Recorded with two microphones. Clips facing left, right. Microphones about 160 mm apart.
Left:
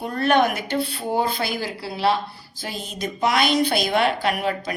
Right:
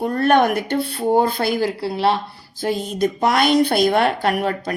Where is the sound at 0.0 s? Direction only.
50° right (ahead or behind).